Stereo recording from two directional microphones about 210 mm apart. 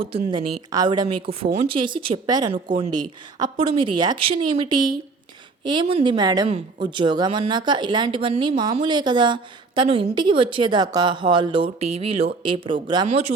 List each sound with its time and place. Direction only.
0.1 s a woman's voice: 20° right (ahead or behind)